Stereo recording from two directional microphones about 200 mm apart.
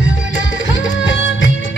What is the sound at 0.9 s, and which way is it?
Music, 70° left (ahead or behind).